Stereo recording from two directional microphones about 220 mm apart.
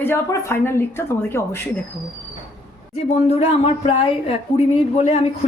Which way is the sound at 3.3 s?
30° left (ahead or behind).